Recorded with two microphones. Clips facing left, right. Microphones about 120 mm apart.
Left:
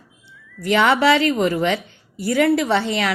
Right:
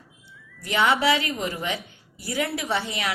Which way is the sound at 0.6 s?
65° left (ahead or behind).